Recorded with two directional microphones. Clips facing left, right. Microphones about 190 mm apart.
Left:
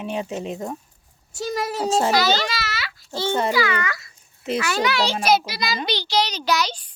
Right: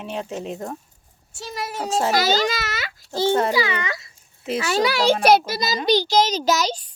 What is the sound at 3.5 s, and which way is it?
A child's voice, 25° right (ahead or behind).